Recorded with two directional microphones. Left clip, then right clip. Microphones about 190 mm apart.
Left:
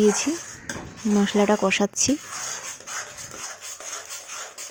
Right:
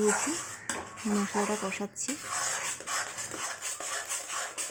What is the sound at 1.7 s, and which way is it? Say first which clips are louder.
Speech: left 14 dB; 35° left (ahead or behind).